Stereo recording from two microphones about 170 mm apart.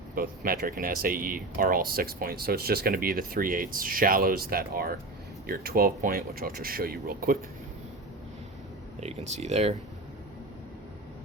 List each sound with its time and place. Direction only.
0.1 s speech: 60° right (ahead or behind)
9.0 s speech: 40° right (ahead or behind)